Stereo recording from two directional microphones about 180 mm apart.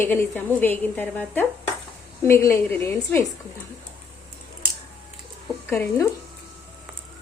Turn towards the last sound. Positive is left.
turn(degrees=15)  # may be behind; listen again after turning